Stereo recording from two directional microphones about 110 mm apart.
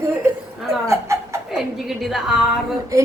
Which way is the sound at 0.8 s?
25° right (ahead or behind).